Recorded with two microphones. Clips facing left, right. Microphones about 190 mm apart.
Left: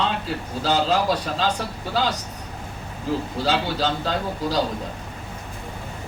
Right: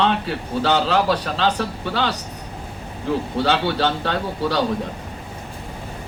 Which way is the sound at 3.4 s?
65° right (ahead or behind).